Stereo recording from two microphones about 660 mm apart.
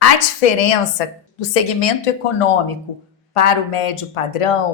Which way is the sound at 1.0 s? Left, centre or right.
Left.